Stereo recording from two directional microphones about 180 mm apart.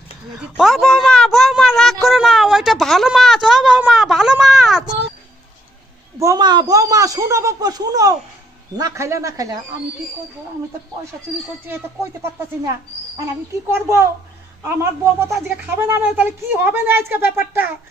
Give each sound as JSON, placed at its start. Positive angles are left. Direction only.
{"t": 0.3, "sound": "a man's voice", "side_deg": 0}
{"t": 6.1, "sound": "speech", "side_deg": -20}
{"t": 11.7, "sound": "speech", "side_deg": -10}
{"t": 13.7, "sound": "speech", "side_deg": -15}